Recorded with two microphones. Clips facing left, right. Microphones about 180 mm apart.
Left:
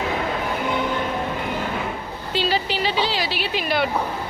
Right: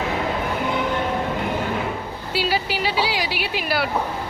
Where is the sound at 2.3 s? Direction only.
10° right (ahead or behind).